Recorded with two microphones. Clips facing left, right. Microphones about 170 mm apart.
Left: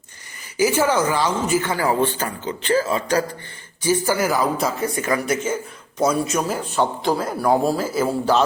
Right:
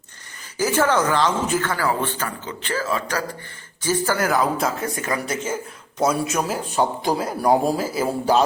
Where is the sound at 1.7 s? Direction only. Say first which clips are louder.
Left 3 dB; 20° left (ahead or behind).